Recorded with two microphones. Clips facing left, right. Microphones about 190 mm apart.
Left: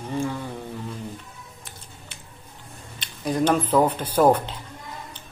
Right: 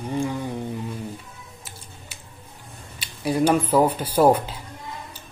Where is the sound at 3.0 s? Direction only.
10° right (ahead or behind).